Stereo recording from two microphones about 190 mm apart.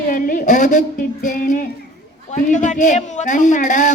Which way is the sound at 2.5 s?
40° left (ahead or behind).